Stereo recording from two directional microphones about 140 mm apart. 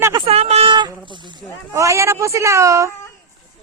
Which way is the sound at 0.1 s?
45° right (ahead or behind).